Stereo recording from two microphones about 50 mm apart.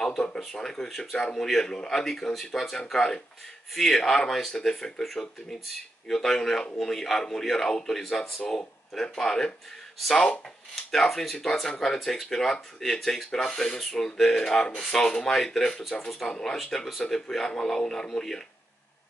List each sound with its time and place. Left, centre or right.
0.0 s speech: centre
2.9 s speech: centre
8.4 s speech: centre
10.9 s speech: centre
13.5 s speech: centre